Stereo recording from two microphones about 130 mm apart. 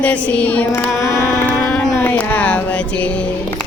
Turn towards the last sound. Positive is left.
turn(degrees=10)  # may be behind; listen again after turning